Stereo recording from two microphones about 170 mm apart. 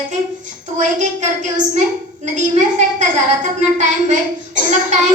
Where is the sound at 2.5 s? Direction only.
45° right (ahead or behind).